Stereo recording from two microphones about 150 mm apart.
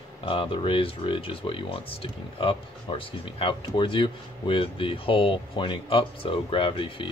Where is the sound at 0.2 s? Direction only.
35° left (ahead or behind).